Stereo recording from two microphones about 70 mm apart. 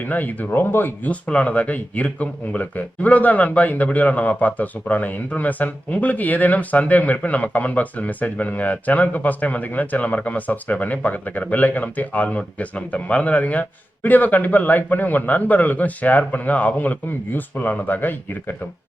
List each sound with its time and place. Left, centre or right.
0.0 s speech: left